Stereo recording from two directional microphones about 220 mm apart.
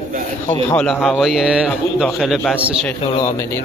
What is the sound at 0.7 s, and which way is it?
A man's voice, 5° left (ahead or behind).